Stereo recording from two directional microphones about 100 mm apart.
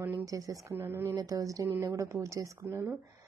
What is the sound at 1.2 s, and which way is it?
Speech, 35° right (ahead or behind).